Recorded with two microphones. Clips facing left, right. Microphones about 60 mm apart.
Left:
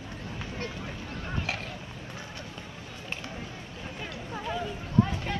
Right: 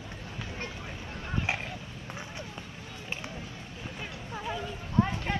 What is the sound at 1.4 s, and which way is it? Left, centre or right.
Vehicle, right.